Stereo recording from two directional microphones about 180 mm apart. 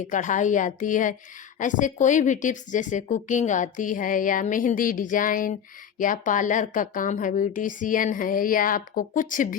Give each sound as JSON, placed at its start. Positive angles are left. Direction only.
{"t": 0.1, "sound": "a woman's voice", "side_deg": 45}